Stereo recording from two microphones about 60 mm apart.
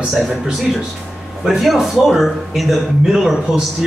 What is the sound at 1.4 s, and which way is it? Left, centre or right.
A man's voice, centre.